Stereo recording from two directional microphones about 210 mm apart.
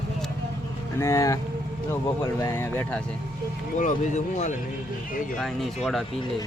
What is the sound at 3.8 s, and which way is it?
Speech, 35° left (ahead or behind).